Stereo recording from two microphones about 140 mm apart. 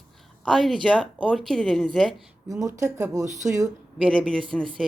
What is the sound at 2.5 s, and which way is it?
Speech, 25° right (ahead or behind).